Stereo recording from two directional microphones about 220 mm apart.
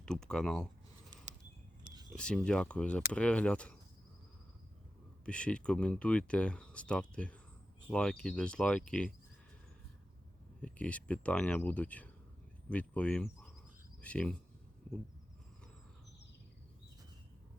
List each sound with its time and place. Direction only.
0.0 s speech: 5° left (ahead or behind)
1.8 s a sound: 20° right (ahead or behind)
2.1 s speech: 5° left (ahead or behind)
5.2 s speech: 5° left (ahead or behind)
10.6 s speech: 5° left (ahead or behind)